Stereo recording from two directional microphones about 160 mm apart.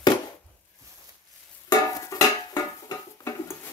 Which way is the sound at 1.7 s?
20° left (ahead or behind).